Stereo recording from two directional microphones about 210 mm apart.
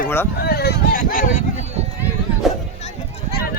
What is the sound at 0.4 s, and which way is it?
Speech, 50° left (ahead or behind).